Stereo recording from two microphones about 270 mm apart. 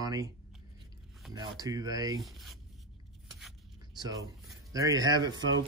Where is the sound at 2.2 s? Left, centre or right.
Centre.